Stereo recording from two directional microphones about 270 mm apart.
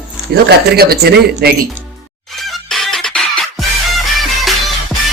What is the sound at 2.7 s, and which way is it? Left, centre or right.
Music, centre.